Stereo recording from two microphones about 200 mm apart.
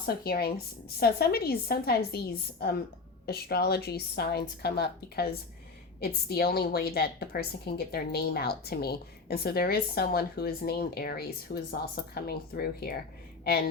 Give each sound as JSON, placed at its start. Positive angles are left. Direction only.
{"t": 0.0, "sound": "a woman's voice", "side_deg": 50}